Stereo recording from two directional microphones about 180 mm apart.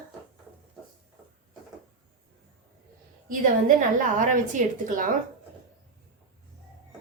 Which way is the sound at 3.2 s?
50° right (ahead or behind).